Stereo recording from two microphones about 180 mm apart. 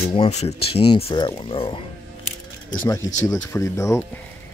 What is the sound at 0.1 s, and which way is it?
Speech, 35° left (ahead or behind).